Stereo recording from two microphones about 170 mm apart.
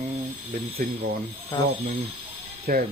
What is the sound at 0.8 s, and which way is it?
Speech, 60° right (ahead or behind).